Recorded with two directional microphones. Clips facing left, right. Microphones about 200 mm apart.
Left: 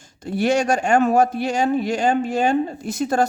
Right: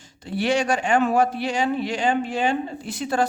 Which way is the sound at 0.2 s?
45° left (ahead or behind).